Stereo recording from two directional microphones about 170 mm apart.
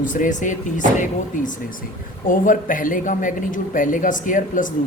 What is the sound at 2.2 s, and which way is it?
A man's voice, 50° left (ahead or behind).